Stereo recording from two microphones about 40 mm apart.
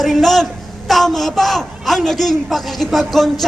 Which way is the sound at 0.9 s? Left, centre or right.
Centre.